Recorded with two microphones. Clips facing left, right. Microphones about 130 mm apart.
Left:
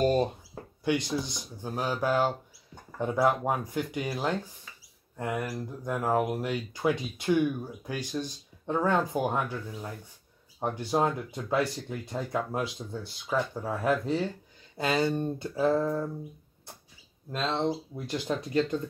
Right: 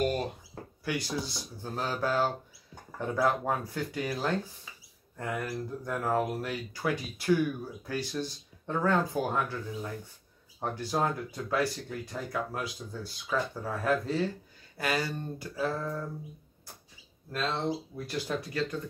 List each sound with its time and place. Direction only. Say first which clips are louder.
0.0 s speech: left 5 dB; 25° left (ahead or behind)
17.3 s speech: left 2 dB; 20° left (ahead or behind)